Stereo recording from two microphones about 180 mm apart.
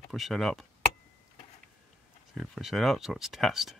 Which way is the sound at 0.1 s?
Centre (ahead or behind).